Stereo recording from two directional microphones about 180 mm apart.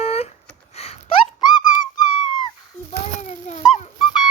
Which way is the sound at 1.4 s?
25° left (ahead or behind).